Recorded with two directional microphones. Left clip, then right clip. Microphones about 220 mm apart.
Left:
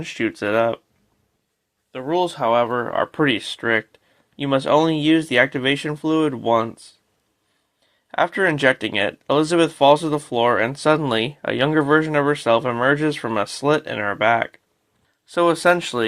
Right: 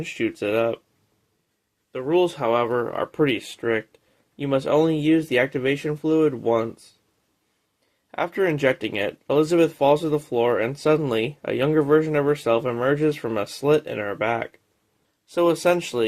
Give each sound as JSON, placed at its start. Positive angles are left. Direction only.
{"t": 0.0, "sound": "speech", "side_deg": 15}
{"t": 1.9, "sound": "speech", "side_deg": 30}
{"t": 8.1, "sound": "speech", "side_deg": 20}